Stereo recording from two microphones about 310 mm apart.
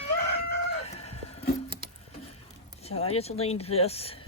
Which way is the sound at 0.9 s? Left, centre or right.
Centre.